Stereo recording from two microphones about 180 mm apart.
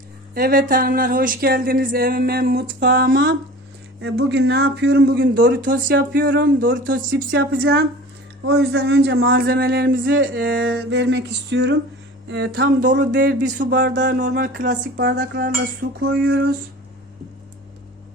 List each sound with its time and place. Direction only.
0.3 s a sound: 55° right (ahead or behind)
4.0 s a man's voice: 75° right (ahead or behind)
5.6 s speech: 50° right (ahead or behind)
7.1 s a woman's voice: 85° right
8.4 s a sound: 65° right (ahead or behind)
10.6 s a man's voice: 85° right
13.4 s speech: 50° right (ahead or behind)
14.9 s a sound: 60° right (ahead or behind)
16.0 s a man's voice: 75° right (ahead or behind)